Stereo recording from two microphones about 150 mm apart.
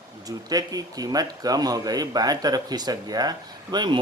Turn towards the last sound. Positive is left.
turn(degrees=-30)  # may be behind; listen again after turning